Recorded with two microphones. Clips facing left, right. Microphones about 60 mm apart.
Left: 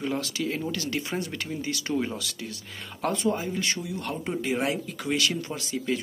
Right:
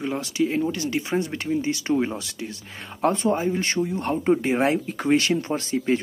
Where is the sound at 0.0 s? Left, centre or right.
Centre.